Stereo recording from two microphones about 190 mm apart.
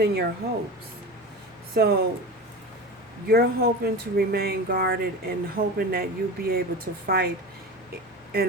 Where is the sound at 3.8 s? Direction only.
55° right (ahead or behind).